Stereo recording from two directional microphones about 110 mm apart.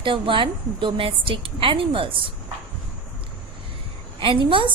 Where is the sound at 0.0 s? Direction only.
50° right (ahead or behind).